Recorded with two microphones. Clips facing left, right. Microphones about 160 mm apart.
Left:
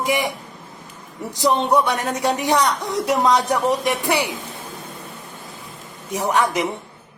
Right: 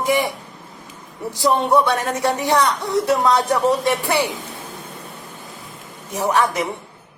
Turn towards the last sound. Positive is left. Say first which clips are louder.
# right 1 dB
turn(degrees=15)  # may be behind; listen again after turning